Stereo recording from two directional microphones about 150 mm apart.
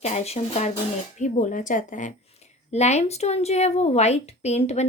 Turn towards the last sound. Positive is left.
turn(degrees=45)  # may be behind; listen again after turning